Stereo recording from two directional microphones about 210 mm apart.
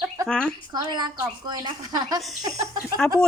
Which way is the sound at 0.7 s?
20° right (ahead or behind).